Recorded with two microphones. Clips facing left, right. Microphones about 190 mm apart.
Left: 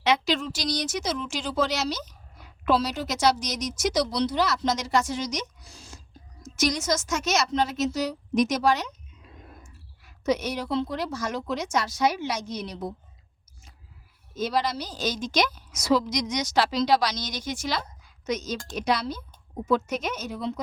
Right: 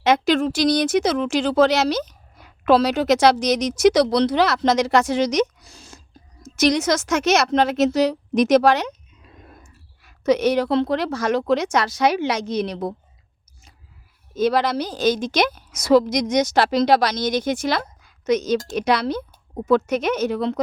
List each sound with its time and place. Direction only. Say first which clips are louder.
0.0 s a woman's voice: right 7 dB; 50° right (ahead or behind); by 8.9 s 70° right (ahead or behind)
10.0 s speech: right 8 dB; 70° right (ahead or behind)
14.3 s a woman's voice: right 7 dB; 60° right (ahead or behind)